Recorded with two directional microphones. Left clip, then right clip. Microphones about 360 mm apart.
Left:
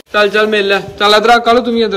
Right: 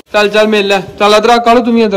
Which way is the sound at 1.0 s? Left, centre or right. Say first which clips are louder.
Right 2 dB; right.